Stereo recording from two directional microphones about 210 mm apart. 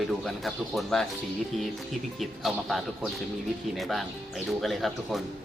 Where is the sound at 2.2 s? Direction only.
Centre (ahead or behind).